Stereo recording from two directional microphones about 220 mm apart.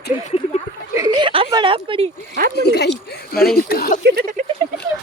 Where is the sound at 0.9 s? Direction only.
20° right (ahead or behind).